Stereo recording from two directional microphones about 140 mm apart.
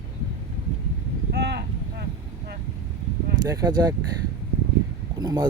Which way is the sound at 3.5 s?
30° right (ahead or behind).